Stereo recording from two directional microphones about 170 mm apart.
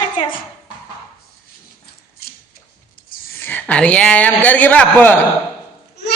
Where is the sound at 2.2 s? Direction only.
60° left (ahead or behind).